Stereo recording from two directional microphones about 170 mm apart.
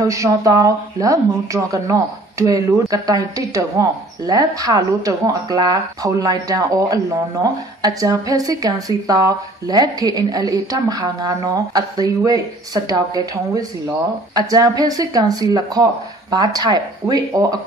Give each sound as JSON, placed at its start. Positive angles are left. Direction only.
{"t": 0.0, "sound": "a woman's voice", "side_deg": -20}